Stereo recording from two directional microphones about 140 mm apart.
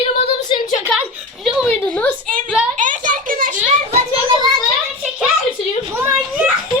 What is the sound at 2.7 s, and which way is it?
Speech, 65° right (ahead or behind).